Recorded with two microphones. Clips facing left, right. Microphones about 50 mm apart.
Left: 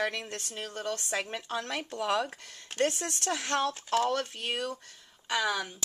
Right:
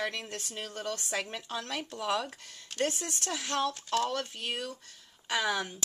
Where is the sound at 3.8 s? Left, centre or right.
Centre.